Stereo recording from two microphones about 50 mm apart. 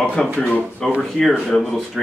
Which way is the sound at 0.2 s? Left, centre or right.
Centre.